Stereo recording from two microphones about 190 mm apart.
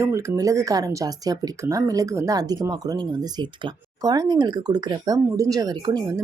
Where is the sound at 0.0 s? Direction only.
15° right (ahead or behind).